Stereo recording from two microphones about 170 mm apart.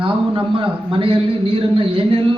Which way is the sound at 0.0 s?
30° right (ahead or behind).